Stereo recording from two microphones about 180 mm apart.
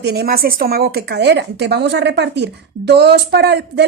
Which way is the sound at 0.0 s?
60° right (ahead or behind).